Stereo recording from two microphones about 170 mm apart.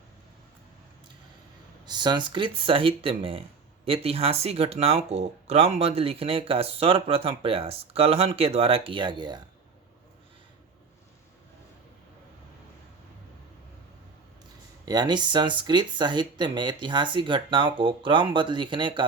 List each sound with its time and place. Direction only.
1.8 s speech: 25° right (ahead or behind)
14.8 s speech: 25° right (ahead or behind)